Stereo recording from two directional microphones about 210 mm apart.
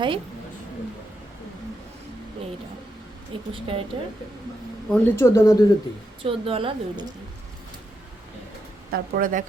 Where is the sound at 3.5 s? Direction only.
25° right (ahead or behind).